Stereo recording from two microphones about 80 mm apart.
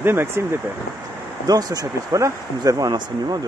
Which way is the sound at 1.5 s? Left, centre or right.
Right.